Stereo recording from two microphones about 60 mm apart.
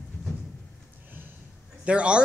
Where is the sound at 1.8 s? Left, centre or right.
Centre.